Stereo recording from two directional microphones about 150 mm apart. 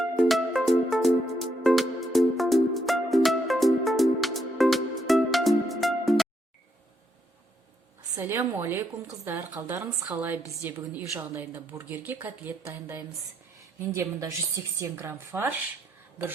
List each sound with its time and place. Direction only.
0.2 s music: centre (ahead or behind)
8.1 s a woman's voice: 20° right (ahead or behind)